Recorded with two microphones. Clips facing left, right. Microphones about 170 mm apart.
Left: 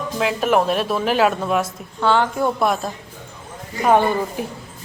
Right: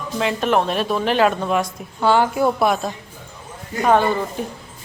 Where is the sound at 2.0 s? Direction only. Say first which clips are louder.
Right 1 dB; 10° right (ahead or behind).